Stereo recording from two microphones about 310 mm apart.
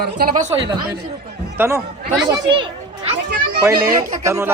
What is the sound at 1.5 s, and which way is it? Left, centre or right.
A child's voice, centre.